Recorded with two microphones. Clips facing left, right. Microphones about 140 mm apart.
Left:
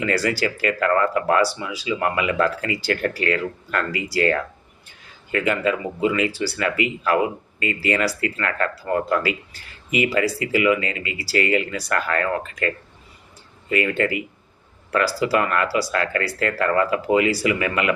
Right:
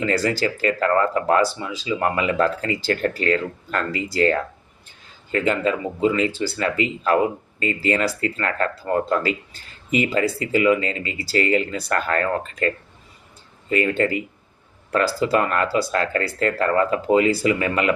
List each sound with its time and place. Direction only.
0.3 s speech: 30° right (ahead or behind)